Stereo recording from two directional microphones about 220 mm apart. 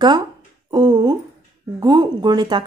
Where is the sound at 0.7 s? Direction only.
20° right (ahead or behind).